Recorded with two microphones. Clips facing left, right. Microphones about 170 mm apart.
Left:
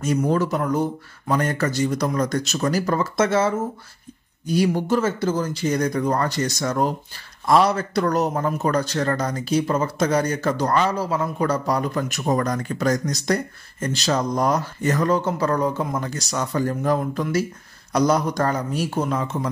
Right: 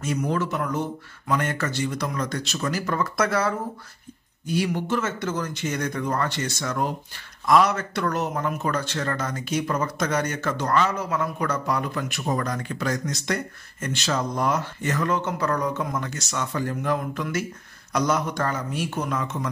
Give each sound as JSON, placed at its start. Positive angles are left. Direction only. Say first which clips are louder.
{"t": 0.0, "sound": "speech", "louder": "left 5 dB", "side_deg": 35}
{"t": 4.5, "sound": "speech", "louder": "left 5 dB", "side_deg": 40}